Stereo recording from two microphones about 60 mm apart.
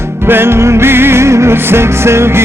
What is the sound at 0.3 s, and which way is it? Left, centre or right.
Music, right.